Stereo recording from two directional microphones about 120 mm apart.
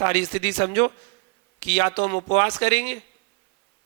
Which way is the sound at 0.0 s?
25° left (ahead or behind).